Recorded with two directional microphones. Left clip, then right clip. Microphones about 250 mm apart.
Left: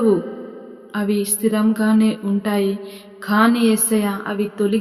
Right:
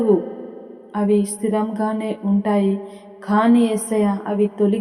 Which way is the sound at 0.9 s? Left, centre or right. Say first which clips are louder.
Right 3 dB; left.